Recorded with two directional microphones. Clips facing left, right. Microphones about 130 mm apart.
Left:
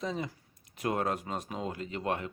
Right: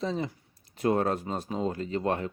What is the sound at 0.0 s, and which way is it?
Speech, 30° right (ahead or behind).